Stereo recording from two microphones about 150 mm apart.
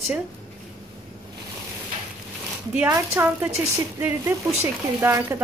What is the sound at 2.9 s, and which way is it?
A woman's voice, 20° right (ahead or behind).